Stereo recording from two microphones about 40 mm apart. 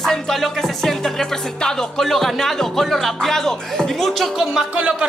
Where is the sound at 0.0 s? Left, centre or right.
Centre.